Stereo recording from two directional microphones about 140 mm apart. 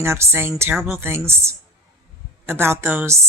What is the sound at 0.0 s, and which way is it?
Speech, 20° right (ahead or behind).